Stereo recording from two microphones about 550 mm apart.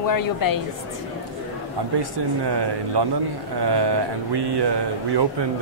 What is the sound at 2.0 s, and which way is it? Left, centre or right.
Speech, right.